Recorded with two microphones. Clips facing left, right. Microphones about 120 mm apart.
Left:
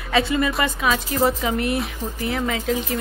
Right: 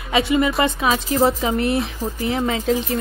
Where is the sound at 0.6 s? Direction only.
25° right (ahead or behind).